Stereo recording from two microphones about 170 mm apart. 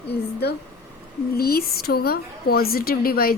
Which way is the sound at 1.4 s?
60° left (ahead or behind).